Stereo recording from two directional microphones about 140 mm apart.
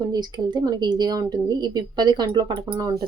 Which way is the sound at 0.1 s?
30° right (ahead or behind).